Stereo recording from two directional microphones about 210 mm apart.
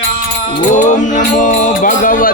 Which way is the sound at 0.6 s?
35° left (ahead or behind).